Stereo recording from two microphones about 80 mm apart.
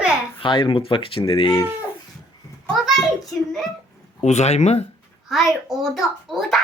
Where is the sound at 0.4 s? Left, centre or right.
Left.